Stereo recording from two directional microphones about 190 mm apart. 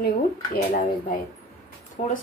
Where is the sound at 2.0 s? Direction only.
35° left (ahead or behind).